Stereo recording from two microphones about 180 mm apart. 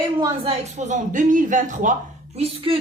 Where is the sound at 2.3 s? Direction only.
30° right (ahead or behind).